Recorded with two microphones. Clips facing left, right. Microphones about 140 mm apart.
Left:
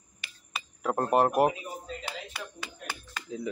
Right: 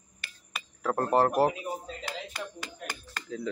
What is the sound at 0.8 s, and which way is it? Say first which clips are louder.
Speech: even; 15° left (ahead or behind).